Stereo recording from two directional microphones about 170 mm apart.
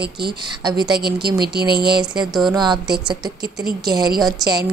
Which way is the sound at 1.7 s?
70° right (ahead or behind).